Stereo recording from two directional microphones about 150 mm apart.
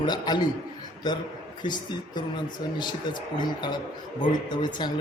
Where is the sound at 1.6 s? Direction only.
30° left (ahead or behind).